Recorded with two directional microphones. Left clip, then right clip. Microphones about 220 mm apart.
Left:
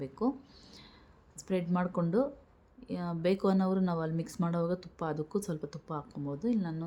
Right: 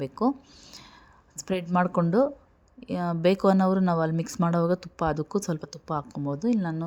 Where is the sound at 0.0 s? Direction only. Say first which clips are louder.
Right 7 dB; 35° right (ahead or behind).